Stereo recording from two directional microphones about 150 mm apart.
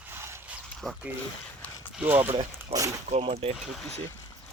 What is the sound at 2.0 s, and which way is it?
Speech, 15° right (ahead or behind).